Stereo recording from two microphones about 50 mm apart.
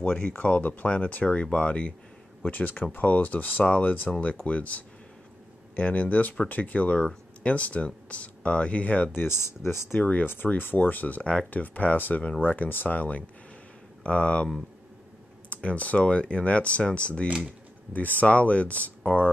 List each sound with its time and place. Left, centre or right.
0.0 s speech: left
9.3 s speech: left
10.2 s speech: left
14.0 s speech: left
15.5 s speech: left
17.9 s speech: left